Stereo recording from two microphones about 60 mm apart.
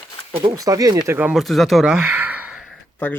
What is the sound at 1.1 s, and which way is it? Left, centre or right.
Speech, right.